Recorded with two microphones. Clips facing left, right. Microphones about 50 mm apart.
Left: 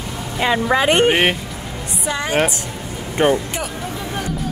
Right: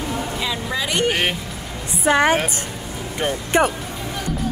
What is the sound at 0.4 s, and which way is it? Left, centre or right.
Speech, left.